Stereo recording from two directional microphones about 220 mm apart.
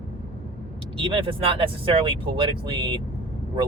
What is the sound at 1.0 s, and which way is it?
Speech, 25° right (ahead or behind).